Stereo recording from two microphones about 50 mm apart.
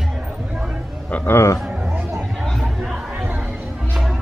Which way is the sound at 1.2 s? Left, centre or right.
Left.